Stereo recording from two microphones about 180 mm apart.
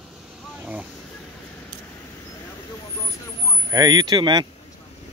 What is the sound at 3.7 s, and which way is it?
Speech, 20° right (ahead or behind).